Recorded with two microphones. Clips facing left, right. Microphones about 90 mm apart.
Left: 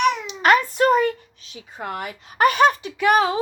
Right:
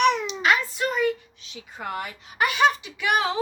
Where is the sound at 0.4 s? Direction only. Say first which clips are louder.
Left 8 dB; 50° left (ahead or behind).